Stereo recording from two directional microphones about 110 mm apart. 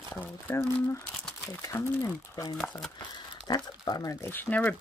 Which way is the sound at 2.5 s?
Centre (ahead or behind).